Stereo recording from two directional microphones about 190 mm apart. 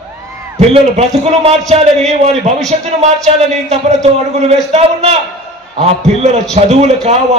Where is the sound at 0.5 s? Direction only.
35° right (ahead or behind).